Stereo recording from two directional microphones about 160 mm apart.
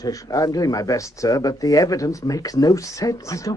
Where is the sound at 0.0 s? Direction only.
20° left (ahead or behind).